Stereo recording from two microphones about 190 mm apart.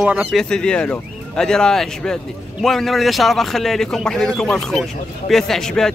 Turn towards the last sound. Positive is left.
turn(degrees=5)  # may be behind; listen again after turning